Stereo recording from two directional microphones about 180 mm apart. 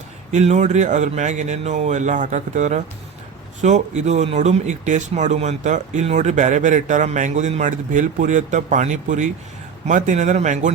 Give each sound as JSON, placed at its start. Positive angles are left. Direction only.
{"t": 0.3, "sound": "a man's voice", "side_deg": -40}